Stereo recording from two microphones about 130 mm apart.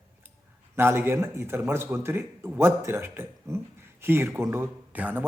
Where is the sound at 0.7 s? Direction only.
20° right (ahead or behind).